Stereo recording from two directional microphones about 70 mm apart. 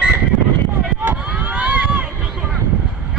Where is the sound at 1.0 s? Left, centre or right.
Right.